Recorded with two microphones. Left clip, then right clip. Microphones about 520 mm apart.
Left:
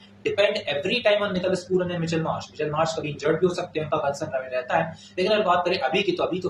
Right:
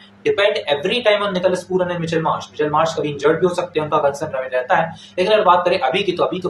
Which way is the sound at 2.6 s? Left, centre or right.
Left.